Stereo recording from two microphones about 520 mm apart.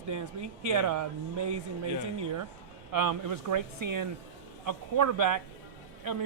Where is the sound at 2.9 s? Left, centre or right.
Right.